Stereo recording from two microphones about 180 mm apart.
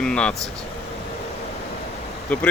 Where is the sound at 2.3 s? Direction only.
5° left (ahead or behind).